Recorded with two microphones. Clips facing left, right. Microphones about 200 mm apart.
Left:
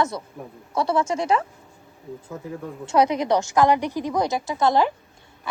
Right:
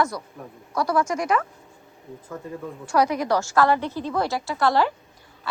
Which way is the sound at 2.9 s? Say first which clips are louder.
Left 2 dB; 20° left (ahead or behind).